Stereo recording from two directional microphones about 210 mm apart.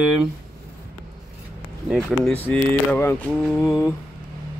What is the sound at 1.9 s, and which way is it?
Speech, centre (ahead or behind).